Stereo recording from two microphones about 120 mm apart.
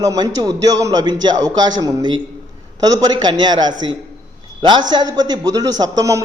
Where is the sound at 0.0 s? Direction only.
30° right (ahead or behind).